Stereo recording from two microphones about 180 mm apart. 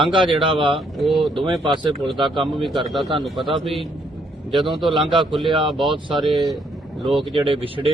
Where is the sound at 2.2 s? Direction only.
Centre (ahead or behind).